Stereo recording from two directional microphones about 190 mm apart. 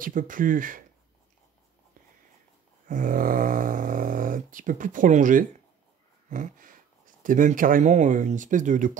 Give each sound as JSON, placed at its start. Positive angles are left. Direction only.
{"t": 0.0, "sound": "speech", "side_deg": -45}
{"t": 2.9, "sound": "speech", "side_deg": -45}